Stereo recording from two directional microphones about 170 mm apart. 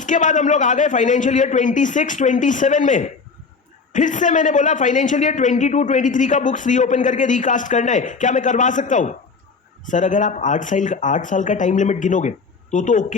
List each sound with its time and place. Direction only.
0.0 s a man's voice: 50° left (ahead or behind)